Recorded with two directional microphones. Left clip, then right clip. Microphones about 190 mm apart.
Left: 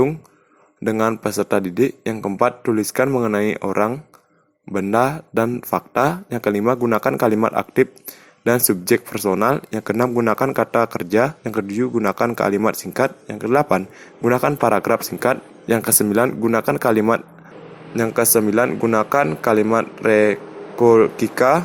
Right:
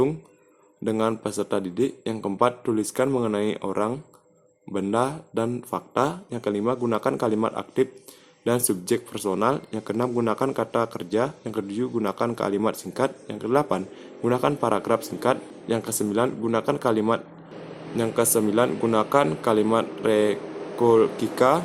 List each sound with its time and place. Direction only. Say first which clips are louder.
0.9 s speech: left 5 dB; 35° left (ahead or behind)